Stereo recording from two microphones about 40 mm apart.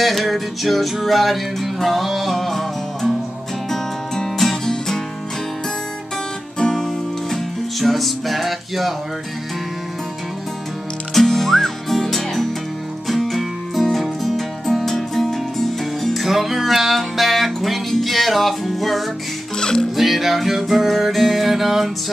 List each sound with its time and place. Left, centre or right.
0.0 s music: centre
6.6 s music: centre
7.8 s music: centre
11.1 s music: centre
19.6 s music: centre
20.0 s music: centre